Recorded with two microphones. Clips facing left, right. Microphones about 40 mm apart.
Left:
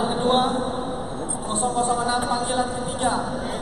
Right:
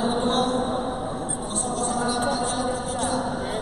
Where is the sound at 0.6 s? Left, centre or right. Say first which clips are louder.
Right 1 dB; centre.